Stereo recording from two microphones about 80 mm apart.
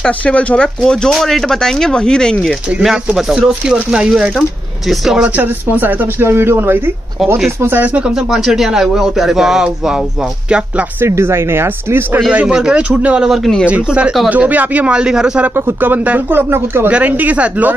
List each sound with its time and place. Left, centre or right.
0.2 s speech: centre
3.2 s speech: centre
5.3 s speech: right
8.1 s a man's voice: centre
11.0 s speech: right
12.3 s speech: centre
13.3 s a man's voice: centre
13.7 s speech: centre
15.5 s speech: right
16.9 s speech: centre